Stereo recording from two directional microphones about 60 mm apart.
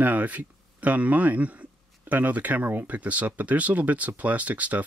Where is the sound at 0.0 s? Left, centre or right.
Right.